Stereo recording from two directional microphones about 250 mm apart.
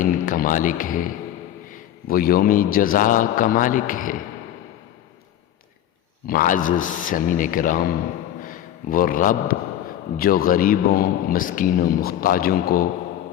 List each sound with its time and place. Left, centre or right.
0.0 s music: left
2.0 s a man's voice: left
6.2 s a man's voice: left